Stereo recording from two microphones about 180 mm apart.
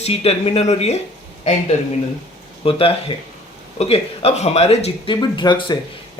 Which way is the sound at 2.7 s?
30° left (ahead or behind).